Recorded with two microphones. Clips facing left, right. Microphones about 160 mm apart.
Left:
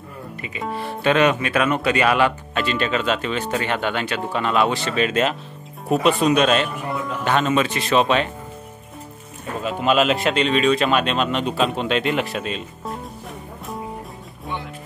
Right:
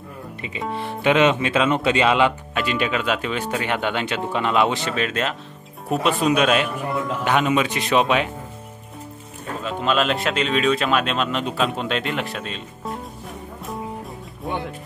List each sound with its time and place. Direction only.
1.0 s speech: 20° right (ahead or behind)
4.9 s speech: 5° left (ahead or behind)
9.6 s speech: 10° left (ahead or behind)